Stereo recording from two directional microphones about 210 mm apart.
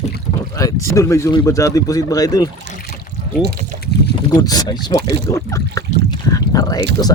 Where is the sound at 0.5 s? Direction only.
15° left (ahead or behind).